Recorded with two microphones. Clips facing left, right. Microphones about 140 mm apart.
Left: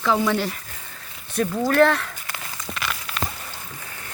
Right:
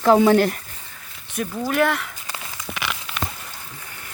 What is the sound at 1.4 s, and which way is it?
Speech, centre (ahead or behind).